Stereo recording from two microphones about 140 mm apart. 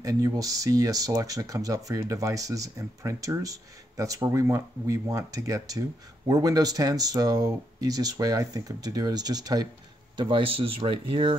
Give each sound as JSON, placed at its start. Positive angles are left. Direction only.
{"t": 0.0, "sound": "speech", "side_deg": -25}